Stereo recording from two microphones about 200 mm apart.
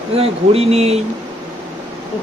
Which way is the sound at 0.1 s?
30° right (ahead or behind).